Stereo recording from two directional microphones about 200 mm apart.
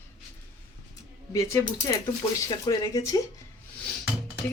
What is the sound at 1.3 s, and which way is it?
Speech, 15° left (ahead or behind).